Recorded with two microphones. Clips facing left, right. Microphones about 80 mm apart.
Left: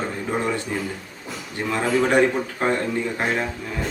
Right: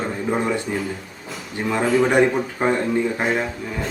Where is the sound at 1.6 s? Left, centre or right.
Centre.